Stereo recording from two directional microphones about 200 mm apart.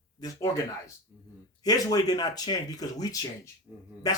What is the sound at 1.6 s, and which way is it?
Speech, 20° left (ahead or behind).